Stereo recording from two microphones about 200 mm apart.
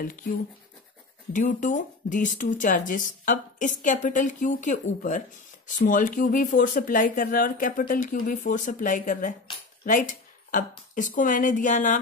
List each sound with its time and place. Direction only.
1.3 s speech: 40° left (ahead or behind)